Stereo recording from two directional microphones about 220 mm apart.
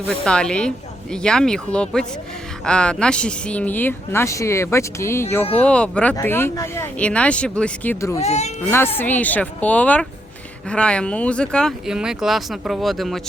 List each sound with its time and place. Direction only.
0.3 s speech: 5° left (ahead or behind)
8.2 s speech: 30° left (ahead or behind)
9.0 s speech: 5° left (ahead or behind)